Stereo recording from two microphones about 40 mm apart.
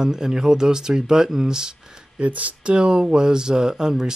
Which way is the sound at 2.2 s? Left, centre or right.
Right.